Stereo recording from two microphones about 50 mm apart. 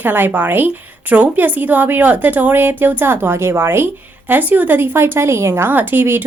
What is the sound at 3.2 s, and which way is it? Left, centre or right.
Speech, right.